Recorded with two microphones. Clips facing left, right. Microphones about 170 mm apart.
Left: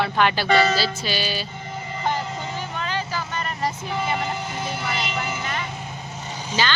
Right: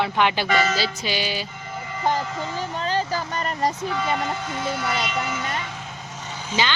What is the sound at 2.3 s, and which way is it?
Speech, 25° left (ahead or behind).